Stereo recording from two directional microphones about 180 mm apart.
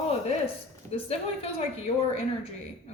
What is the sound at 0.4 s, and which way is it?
A woman's voice, 30° left (ahead or behind).